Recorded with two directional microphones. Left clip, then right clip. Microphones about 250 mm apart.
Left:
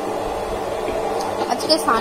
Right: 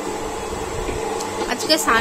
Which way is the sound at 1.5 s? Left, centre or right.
Right.